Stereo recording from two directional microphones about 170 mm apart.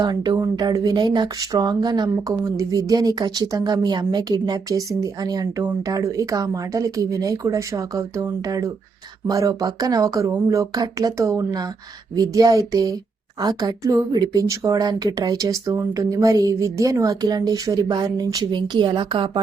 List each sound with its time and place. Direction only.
0.0 s speech: 25° right (ahead or behind)